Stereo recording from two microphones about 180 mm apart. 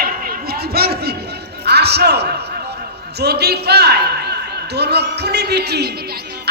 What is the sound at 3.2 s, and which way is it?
A woman's voice, 65° right (ahead or behind).